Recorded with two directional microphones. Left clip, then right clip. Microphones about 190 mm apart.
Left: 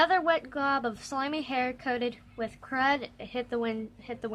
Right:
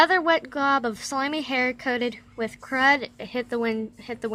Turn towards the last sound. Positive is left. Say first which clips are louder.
# right 6 dB
turn(degrees=-25)  # may be behind; listen again after turning